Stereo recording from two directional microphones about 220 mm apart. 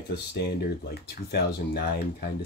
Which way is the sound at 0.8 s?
45° left (ahead or behind).